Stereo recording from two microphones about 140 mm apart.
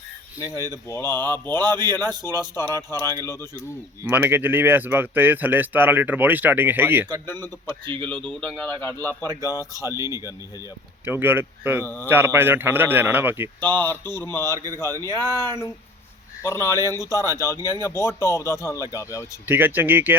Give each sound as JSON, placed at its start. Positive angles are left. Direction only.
{"t": 0.7, "sound": "a man's voice", "side_deg": 20}
{"t": 4.0, "sound": "speech", "side_deg": -15}
{"t": 7.3, "sound": "a man's voice", "side_deg": 15}
{"t": 9.9, "sound": "speech", "side_deg": -25}
{"t": 13.6, "sound": "a man's voice", "side_deg": 15}
{"t": 14.5, "sound": "speech", "side_deg": -25}
{"t": 14.8, "sound": "a man's voice", "side_deg": 20}
{"t": 19.5, "sound": "speech", "side_deg": -15}